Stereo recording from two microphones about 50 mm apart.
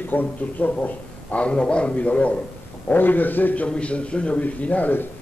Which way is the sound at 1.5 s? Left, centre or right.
Centre.